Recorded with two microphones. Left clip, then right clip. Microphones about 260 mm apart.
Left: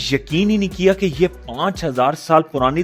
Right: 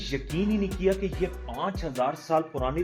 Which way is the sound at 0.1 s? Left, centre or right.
Left.